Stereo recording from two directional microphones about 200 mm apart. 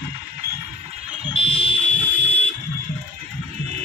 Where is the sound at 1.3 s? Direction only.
25° left (ahead or behind).